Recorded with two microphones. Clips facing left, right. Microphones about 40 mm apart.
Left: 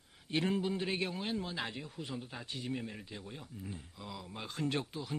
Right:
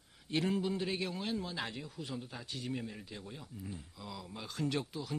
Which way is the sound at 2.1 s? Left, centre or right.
Centre.